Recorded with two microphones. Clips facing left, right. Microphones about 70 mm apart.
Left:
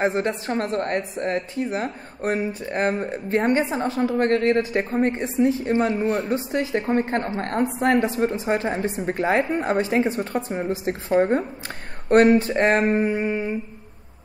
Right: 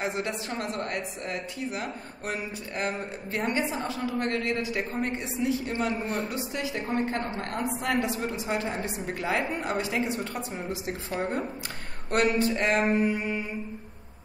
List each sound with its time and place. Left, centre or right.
0.0 s a woman's voice: left